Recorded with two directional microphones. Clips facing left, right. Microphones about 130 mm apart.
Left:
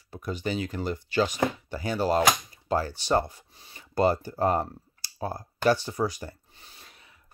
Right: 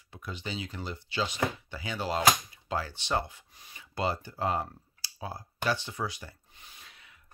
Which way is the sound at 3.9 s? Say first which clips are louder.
Left 8 dB; 45° left (ahead or behind).